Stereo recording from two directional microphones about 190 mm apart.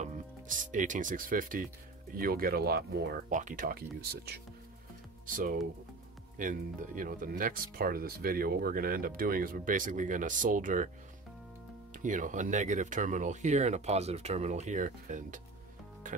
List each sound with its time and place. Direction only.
0.0 s speech: 45° right (ahead or behind)
3.3 s speech: 45° right (ahead or behind)
5.2 s speech: 45° right (ahead or behind)
11.9 s speech: 45° right (ahead or behind)